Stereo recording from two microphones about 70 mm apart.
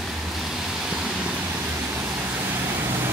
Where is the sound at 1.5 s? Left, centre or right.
Right.